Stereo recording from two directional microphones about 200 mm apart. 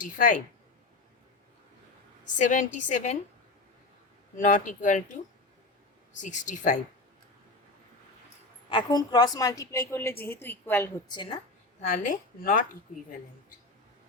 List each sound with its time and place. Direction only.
0.0 s a woman's voice: 40° left (ahead or behind)
2.3 s a woman's voice: 40° left (ahead or behind)
4.4 s a woman's voice: 40° left (ahead or behind)
6.2 s a woman's voice: 40° left (ahead or behind)
8.7 s a woman's voice: 20° left (ahead or behind)
11.1 s a woman's voice: 25° left (ahead or behind)
11.8 s a woman's voice: 40° left (ahead or behind)